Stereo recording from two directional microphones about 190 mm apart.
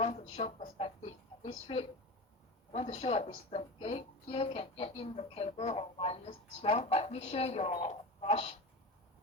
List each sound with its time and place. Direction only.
0.0 s a woman's voice: 35° left (ahead or behind)